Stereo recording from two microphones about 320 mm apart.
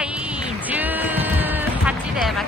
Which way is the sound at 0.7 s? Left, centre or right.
Centre.